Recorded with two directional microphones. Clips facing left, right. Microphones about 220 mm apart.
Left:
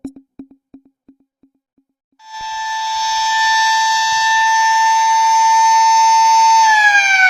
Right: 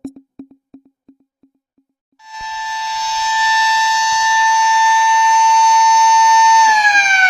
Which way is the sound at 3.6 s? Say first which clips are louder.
Even; centre (ahead or behind).